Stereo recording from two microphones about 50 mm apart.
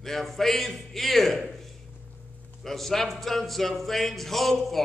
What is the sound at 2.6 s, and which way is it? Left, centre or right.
Speech, centre.